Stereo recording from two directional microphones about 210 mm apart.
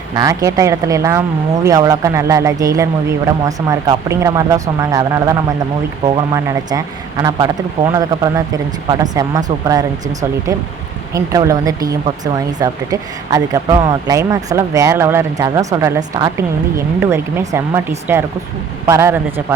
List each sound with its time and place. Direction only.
0.1 s speech: 15° right (ahead or behind)